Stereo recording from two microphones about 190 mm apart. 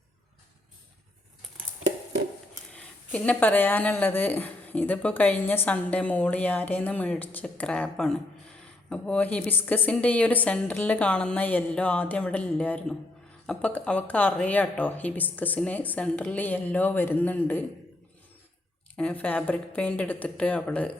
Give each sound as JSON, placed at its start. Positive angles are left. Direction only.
{"t": 2.7, "sound": "speech", "side_deg": 5}
{"t": 18.9, "sound": "speech", "side_deg": 10}